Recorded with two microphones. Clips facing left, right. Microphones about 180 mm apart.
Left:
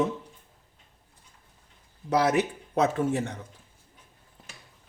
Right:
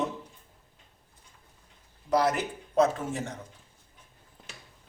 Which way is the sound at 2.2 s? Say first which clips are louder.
Left 4 dB; 65° left (ahead or behind).